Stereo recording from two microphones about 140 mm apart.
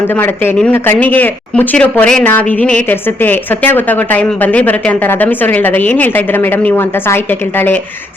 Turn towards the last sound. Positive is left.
turn(degrees=15)  # may be behind; listen again after turning